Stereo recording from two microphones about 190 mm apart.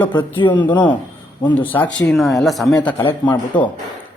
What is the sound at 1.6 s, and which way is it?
Speech, 10° left (ahead or behind).